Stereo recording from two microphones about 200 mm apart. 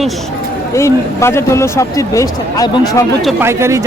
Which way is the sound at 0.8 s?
15° left (ahead or behind).